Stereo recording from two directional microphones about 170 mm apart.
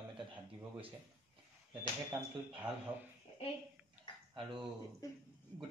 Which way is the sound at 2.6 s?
5° right (ahead or behind).